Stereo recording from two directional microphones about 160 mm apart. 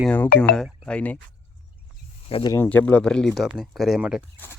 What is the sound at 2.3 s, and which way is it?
Speech, 35° left (ahead or behind).